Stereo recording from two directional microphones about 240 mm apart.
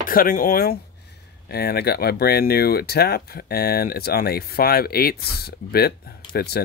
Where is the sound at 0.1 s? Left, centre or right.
Left.